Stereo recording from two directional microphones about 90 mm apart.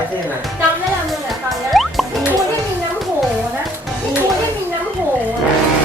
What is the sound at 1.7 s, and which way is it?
Music, centre (ahead or behind).